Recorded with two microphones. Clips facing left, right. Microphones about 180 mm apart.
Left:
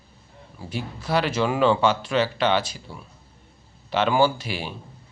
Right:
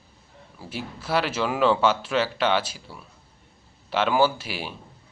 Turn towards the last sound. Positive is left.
turn(degrees=-5)  # may be behind; listen again after turning